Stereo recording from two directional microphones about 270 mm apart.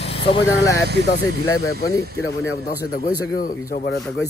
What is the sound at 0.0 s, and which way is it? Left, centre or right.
Speech, centre.